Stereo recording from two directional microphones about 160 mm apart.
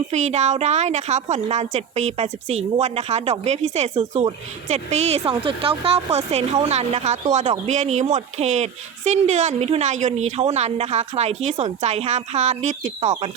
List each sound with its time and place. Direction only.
0.1 s speech: 45° right (ahead or behind)
13.1 s speech: 30° right (ahead or behind)